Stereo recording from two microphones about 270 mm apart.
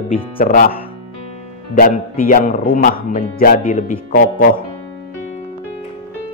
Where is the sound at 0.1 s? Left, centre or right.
Left.